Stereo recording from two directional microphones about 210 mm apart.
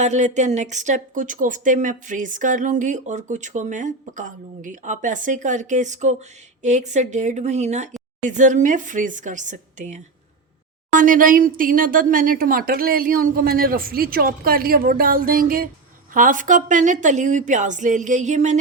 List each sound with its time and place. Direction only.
0.0 s speech: 35° right (ahead or behind)